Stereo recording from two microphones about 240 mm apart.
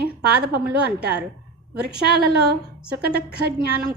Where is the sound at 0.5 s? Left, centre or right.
Right.